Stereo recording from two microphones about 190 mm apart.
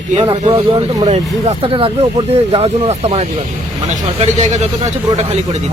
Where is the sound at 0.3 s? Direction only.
25° right (ahead or behind).